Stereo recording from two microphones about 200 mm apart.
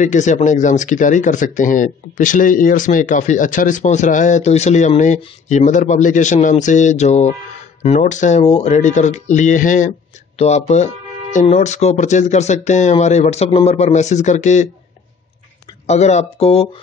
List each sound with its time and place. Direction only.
0.0 s speech: 35° left (ahead or behind)
15.9 s speech: 35° left (ahead or behind)